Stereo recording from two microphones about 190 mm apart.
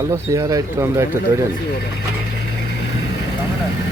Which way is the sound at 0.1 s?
15° right (ahead or behind).